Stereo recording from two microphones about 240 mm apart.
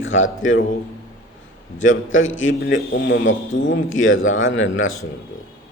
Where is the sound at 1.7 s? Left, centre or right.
Left.